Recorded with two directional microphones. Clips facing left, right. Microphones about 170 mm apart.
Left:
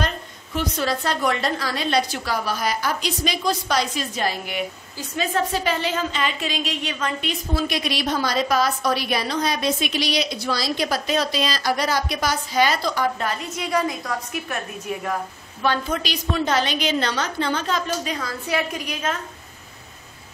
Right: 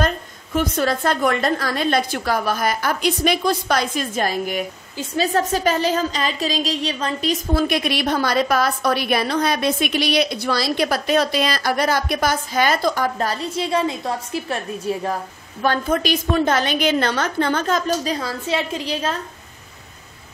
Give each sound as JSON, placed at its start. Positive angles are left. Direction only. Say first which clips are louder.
{"t": 0.6, "sound": "a woman's voice", "louder": "right 4 dB", "side_deg": -50}
{"t": 15.6, "sound": "a woman's voice", "louder": "right 4 dB", "side_deg": -50}